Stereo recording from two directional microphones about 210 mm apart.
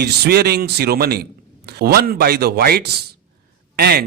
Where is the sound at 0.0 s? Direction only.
50° right (ahead or behind).